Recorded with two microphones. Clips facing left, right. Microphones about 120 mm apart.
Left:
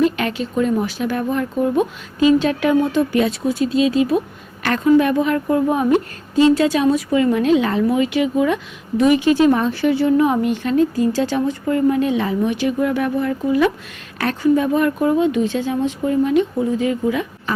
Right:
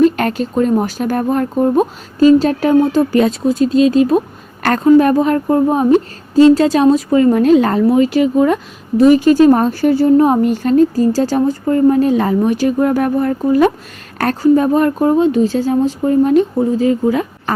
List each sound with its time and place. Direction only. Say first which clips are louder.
0.0 s a woman's voice: right 6 dB; 45° right (ahead or behind)